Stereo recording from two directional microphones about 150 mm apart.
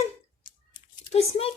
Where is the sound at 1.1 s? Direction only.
40° left (ahead or behind).